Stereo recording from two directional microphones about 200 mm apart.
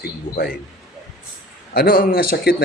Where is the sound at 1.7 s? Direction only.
45° left (ahead or behind).